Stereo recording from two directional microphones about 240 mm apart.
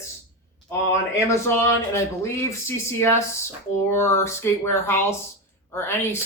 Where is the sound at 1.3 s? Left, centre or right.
Centre.